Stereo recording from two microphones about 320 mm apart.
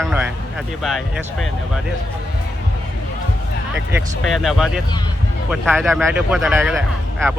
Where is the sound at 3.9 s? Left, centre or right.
Centre.